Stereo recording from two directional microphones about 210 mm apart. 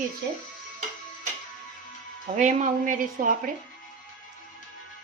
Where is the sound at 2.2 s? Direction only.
35° right (ahead or behind).